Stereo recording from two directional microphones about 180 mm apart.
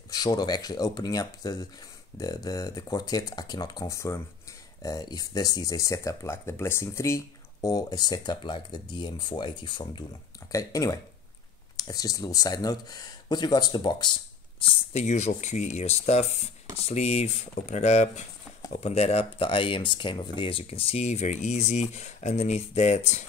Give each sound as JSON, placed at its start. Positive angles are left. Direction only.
{"t": 0.1, "sound": "speech", "side_deg": 20}
{"t": 14.9, "sound": "speech", "side_deg": 40}